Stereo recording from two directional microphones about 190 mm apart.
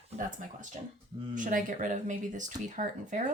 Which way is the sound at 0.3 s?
40° right (ahead or behind).